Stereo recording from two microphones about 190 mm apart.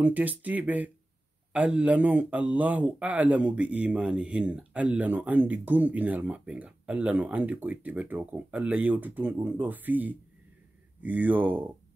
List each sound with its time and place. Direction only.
0.0 s speech: 10° right (ahead or behind)